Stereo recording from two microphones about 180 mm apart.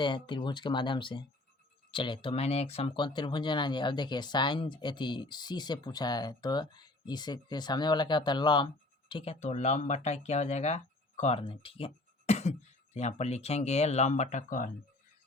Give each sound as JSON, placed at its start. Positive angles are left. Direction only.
{"t": 0.0, "sound": "speech", "side_deg": 25}